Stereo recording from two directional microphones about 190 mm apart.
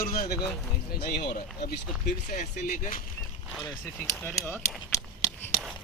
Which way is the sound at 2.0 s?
40° left (ahead or behind).